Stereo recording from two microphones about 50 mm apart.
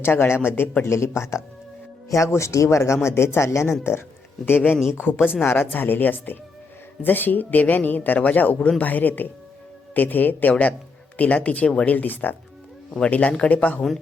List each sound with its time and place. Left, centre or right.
0.0 s speech: left
0.9 s speech: left
2.1 s speech: left
4.4 s speech: left